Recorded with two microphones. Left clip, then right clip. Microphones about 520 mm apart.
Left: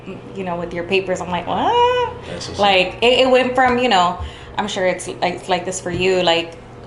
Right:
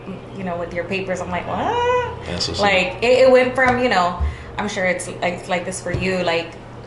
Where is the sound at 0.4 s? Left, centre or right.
Left.